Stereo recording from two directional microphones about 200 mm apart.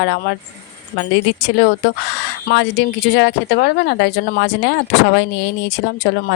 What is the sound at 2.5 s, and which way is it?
Speech, 60° left (ahead or behind).